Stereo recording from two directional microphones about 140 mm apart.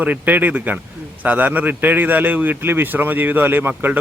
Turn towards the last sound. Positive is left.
turn(degrees=-15)  # may be behind; listen again after turning